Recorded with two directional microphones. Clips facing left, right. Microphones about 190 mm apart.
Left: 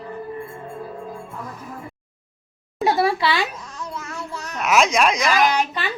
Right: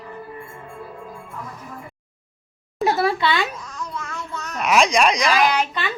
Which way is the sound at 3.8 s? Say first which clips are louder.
Even; 30° left (ahead or behind).